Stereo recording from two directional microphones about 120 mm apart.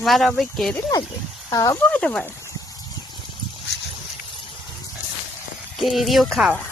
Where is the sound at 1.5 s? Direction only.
30° left (ahead or behind).